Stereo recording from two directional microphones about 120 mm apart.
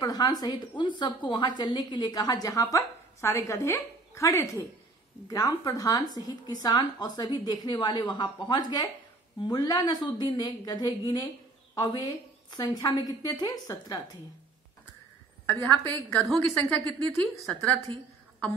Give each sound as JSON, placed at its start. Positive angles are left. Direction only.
{"t": 0.0, "sound": "a woman's voice", "side_deg": 35}
{"t": 15.6, "sound": "a woman's voice", "side_deg": 15}